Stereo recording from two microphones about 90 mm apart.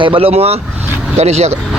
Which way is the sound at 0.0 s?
80° right.